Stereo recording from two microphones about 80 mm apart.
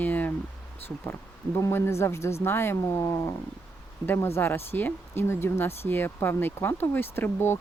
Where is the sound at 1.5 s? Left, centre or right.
Left.